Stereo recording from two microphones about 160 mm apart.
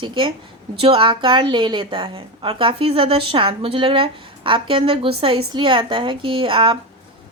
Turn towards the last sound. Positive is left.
turn(degrees=-35)  # may be behind; listen again after turning